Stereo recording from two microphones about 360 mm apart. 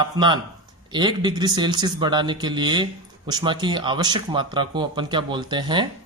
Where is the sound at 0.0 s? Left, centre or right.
Centre.